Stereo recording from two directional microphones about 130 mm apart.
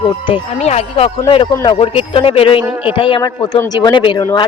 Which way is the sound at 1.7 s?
45° left (ahead or behind).